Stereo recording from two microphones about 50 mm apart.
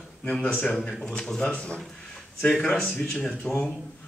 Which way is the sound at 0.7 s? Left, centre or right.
Centre.